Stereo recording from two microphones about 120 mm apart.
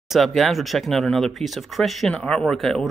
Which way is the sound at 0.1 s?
Centre (ahead or behind).